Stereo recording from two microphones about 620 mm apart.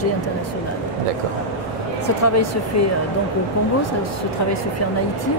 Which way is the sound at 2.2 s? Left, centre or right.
Left.